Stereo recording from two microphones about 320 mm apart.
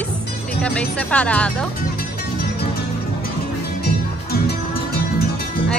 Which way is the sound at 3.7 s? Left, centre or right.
Left.